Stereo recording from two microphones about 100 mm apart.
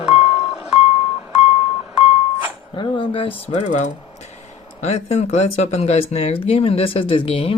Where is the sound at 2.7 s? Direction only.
55° left (ahead or behind).